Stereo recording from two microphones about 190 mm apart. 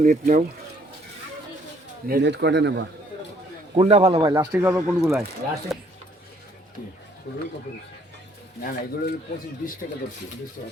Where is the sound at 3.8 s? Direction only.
35° right (ahead or behind); by 4.7 s 15° right (ahead or behind).